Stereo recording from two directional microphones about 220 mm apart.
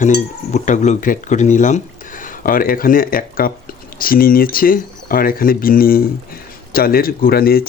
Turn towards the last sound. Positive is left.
turn(degrees=45)  # may be behind; listen again after turning